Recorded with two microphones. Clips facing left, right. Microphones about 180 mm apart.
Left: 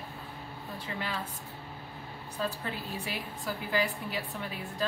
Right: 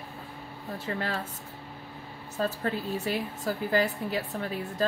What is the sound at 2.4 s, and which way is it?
A woman's voice, 45° right (ahead or behind).